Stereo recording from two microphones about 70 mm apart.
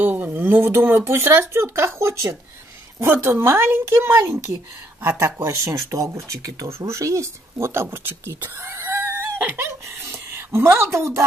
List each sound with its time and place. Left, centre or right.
0.0 s speech: right
7.5 s speech: right